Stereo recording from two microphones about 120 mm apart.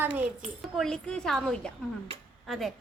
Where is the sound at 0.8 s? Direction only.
5° left (ahead or behind).